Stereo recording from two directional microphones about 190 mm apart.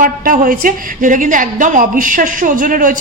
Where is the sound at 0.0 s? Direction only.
50° right (ahead or behind).